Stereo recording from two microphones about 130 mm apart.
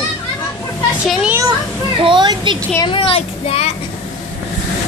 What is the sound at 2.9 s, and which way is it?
Speech, 45° left (ahead or behind).